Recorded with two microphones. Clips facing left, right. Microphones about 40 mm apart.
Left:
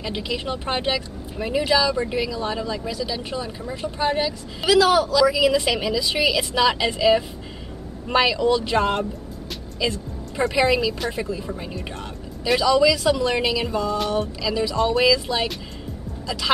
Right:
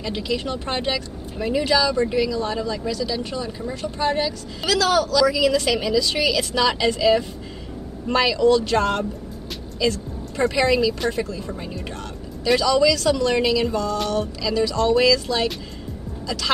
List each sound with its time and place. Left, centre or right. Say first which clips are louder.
0.0 s a woman's voice: right 2 dB; centre
9.8 s music: right 3 dB; centre
10.5 s a woman's voice: even; centre